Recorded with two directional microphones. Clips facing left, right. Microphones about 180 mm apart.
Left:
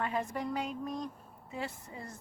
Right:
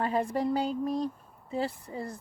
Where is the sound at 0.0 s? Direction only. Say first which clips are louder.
Right 6 dB; 35° right (ahead or behind).